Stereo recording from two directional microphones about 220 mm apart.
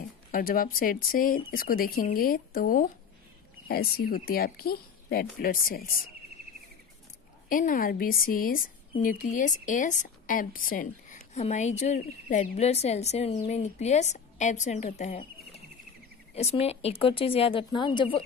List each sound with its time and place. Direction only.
0.3 s a woman's voice: 40° left (ahead or behind)
7.4 s a woman's voice: 40° left (ahead or behind); by 18.2 s 20° left (ahead or behind)